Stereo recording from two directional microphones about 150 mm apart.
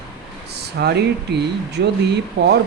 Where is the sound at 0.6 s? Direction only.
90° right.